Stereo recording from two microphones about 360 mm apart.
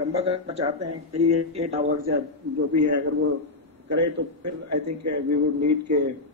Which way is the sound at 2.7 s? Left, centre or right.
Right.